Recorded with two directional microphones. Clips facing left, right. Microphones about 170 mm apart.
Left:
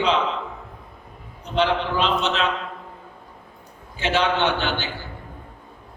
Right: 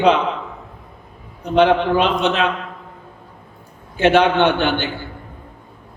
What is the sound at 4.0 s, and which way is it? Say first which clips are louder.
Speech: right 8 dB; 55° right (ahead or behind).